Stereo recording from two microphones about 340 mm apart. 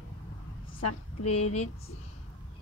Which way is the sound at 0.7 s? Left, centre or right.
Left.